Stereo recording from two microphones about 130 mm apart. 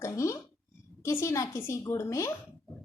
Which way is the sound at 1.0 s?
20° left (ahead or behind).